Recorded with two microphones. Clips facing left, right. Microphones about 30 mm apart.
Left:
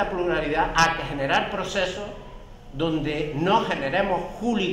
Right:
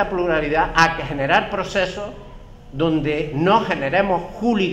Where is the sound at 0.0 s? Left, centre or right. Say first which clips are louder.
Right 5 dB; right.